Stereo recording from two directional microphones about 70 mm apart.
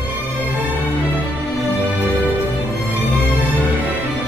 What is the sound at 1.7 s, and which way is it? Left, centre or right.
Music, right.